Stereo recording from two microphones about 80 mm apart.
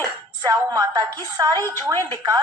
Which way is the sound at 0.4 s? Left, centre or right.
Right.